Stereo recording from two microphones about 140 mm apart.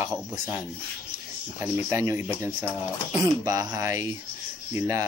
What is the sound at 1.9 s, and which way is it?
Speech, 20° right (ahead or behind).